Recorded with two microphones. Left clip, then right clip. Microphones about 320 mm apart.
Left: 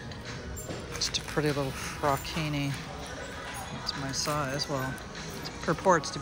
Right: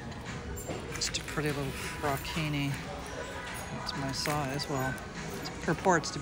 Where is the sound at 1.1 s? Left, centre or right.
Centre.